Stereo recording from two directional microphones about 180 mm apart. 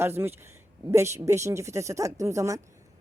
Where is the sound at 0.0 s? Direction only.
10° right (ahead or behind).